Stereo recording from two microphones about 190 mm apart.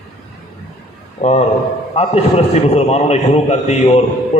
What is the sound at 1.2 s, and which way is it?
A man's voice, 45° left (ahead or behind).